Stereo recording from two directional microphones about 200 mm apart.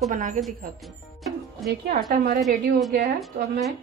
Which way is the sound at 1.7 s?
45° right (ahead or behind).